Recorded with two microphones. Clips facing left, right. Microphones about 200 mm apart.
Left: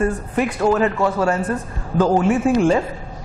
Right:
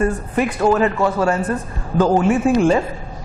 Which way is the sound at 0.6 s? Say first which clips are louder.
Right 1 dB; 25° right (ahead or behind).